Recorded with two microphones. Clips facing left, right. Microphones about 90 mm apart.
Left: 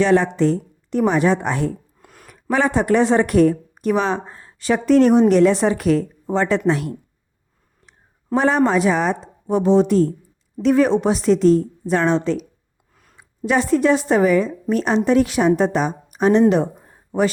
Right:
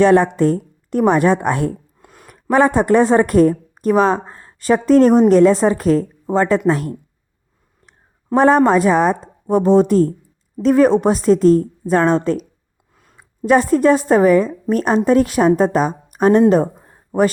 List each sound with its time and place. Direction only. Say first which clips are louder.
0.0 s a woman's voice: right 4 dB; 45° right (ahead or behind)
2.0 s a sound: right 2 dB; 25° right (ahead or behind)
2.2 s a woman's voice: right 5 dB; 45° right (ahead or behind)